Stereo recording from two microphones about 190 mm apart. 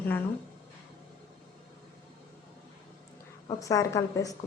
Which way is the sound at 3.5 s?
20° left (ahead or behind).